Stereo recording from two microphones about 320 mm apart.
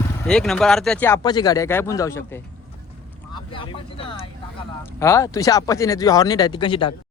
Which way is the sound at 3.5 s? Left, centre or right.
Centre.